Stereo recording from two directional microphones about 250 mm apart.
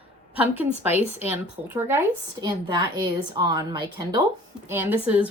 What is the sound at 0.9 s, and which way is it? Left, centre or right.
A woman's voice, centre.